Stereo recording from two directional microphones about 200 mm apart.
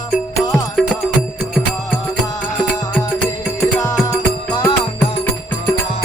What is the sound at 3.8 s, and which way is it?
Music, 20° left (ahead or behind).